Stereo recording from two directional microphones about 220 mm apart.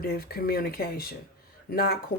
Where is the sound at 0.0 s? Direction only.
45° left (ahead or behind).